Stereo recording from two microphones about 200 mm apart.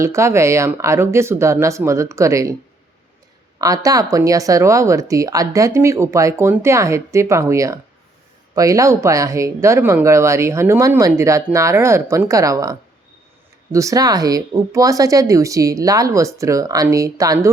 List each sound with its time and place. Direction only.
0.0 s speech: 15° right (ahead or behind)
3.6 s speech: 15° right (ahead or behind)
13.7 s speech: 15° right (ahead or behind)